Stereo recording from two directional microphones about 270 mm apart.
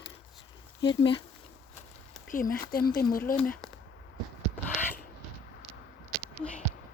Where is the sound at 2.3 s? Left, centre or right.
Left.